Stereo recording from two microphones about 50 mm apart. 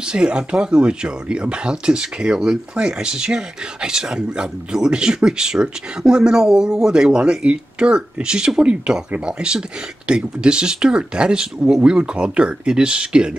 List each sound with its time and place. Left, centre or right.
0.0 s speech: centre